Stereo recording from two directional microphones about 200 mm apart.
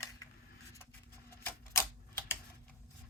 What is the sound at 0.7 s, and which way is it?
Vehicle, 10° left (ahead or behind).